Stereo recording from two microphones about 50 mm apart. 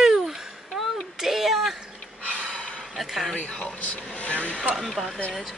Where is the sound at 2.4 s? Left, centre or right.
Centre.